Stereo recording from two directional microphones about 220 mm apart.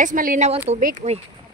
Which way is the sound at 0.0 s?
35° right (ahead or behind).